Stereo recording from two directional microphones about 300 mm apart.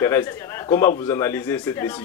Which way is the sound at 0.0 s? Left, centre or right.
Centre.